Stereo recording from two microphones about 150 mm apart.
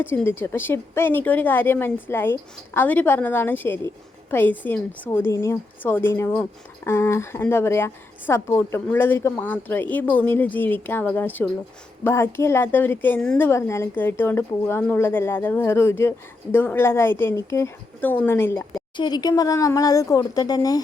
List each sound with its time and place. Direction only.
0.0 s a woman's voice: 15° left (ahead or behind)
18.9 s speech: 30° left (ahead or behind)